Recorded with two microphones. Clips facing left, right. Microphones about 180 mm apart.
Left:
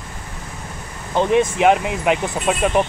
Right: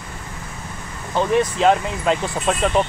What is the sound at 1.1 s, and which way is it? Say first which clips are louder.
Speech: left 2 dB; 20° left (ahead or behind).